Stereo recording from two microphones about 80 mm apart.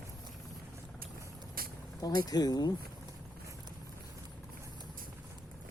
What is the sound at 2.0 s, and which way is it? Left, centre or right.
Speech, left.